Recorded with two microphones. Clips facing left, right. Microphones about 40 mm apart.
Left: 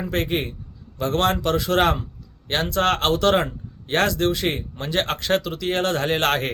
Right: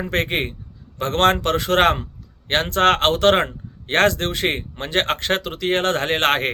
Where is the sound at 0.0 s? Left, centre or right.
Right.